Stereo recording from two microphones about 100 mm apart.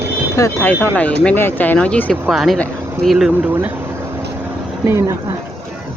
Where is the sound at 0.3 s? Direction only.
30° left (ahead or behind).